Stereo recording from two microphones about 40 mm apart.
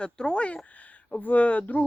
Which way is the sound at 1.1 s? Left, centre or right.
Left.